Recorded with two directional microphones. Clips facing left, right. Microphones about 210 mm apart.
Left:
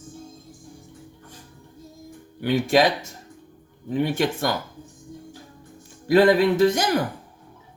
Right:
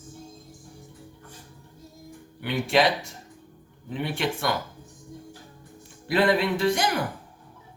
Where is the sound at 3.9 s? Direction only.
45° left (ahead or behind).